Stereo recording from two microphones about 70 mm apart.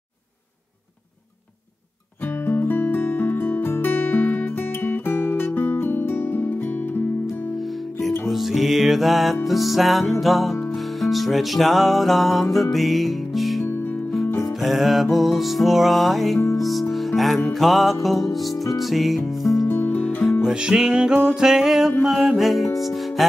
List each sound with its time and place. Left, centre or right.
2.4 s music: left
8.3 s music: centre
19.7 s music: left
20.4 s music: centre